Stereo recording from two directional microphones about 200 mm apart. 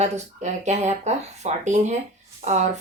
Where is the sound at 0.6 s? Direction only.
35° right (ahead or behind).